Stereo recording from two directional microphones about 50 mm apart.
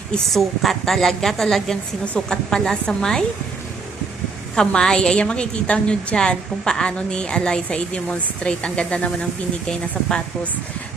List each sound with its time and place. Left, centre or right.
0.3 s a woman's voice: centre
4.5 s a woman's voice: centre